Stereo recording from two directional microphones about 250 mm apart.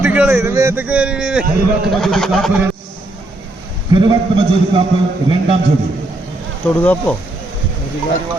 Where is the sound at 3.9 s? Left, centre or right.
Centre.